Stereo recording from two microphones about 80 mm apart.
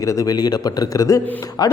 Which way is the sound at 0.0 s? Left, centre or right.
Left.